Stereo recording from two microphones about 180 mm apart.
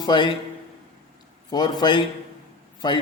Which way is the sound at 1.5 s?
20° left (ahead or behind).